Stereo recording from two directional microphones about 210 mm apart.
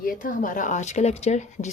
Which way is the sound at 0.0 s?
40° left (ahead or behind).